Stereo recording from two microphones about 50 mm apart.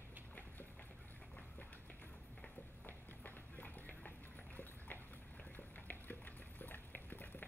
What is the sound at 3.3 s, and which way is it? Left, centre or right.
Clip-clop, left.